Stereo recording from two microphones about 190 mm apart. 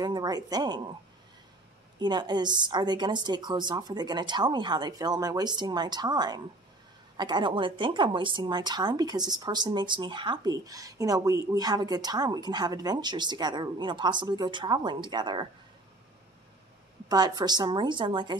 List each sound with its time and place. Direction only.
0.0 s speech: 20° right (ahead or behind)
2.0 s speech: 20° right (ahead or behind)
17.1 s speech: 20° right (ahead or behind)